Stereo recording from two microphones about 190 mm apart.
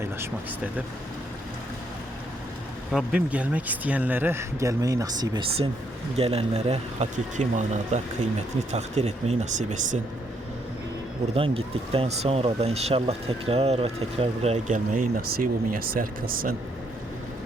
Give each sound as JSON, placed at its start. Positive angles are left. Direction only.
{"t": 0.0, "sound": "speech", "side_deg": -10}
{"t": 2.9, "sound": "speech", "side_deg": -5}
{"t": 11.3, "sound": "speech", "side_deg": -30}